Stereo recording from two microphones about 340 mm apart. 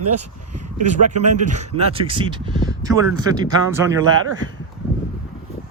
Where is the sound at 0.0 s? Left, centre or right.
Right.